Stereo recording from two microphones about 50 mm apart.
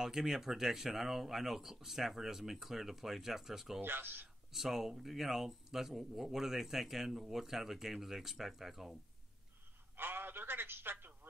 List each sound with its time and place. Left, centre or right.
0.0 s speech: centre
3.8 s speech: right
4.5 s speech: centre
9.9 s telephone: right